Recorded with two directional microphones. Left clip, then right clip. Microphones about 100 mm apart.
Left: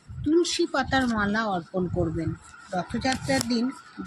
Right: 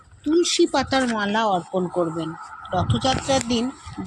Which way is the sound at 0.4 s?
90° right.